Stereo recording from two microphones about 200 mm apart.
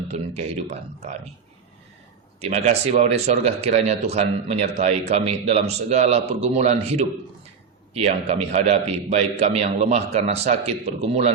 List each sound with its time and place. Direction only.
0.1 s a man's voice: 30° right (ahead or behind)
2.4 s a man's voice: 35° right (ahead or behind)